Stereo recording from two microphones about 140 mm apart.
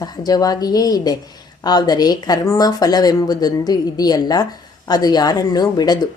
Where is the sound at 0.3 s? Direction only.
25° left (ahead or behind).